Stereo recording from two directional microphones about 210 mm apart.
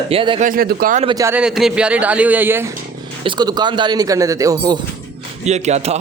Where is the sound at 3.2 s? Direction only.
20° right (ahead or behind).